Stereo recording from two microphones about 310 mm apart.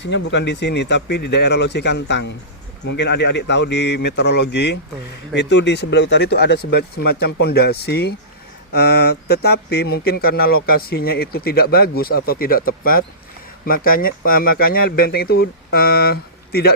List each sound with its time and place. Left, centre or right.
0.0 s speech: left